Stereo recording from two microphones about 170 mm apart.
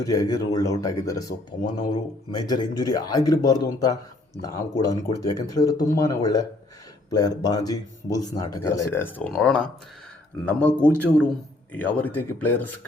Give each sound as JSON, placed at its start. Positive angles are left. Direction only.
{"t": 0.0, "sound": "speech", "side_deg": 20}